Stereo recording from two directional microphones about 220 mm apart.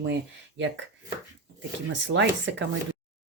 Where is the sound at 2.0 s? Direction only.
55° right (ahead or behind).